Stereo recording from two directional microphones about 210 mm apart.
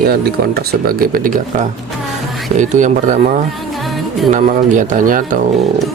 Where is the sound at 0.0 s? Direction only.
45° right (ahead or behind).